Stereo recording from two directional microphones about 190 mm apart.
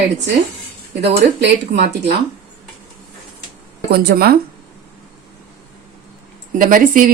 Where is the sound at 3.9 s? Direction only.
60° right (ahead or behind).